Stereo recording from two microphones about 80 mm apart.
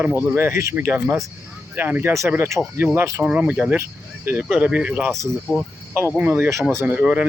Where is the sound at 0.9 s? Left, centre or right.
Right.